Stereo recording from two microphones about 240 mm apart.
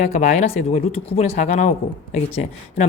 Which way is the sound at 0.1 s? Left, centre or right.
Left.